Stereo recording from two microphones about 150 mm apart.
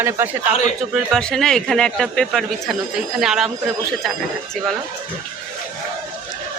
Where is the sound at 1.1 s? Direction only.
5° left (ahead or behind).